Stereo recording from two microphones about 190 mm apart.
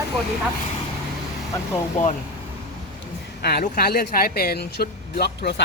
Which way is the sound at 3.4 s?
55° left (ahead or behind).